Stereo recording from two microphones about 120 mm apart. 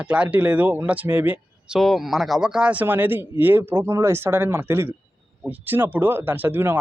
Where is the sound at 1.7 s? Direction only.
Centre (ahead or behind); by 6.8 s 15° right (ahead or behind).